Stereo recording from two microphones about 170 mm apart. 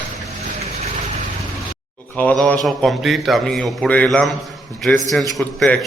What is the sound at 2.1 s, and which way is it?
Speech, 10° left (ahead or behind).